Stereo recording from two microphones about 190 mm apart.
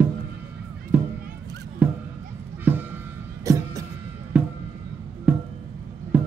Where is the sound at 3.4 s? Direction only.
20° right (ahead or behind).